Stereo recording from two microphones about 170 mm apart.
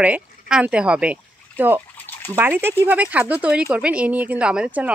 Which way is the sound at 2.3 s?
15° right (ahead or behind).